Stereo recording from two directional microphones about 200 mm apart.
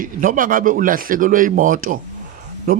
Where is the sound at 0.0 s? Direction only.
45° right (ahead or behind).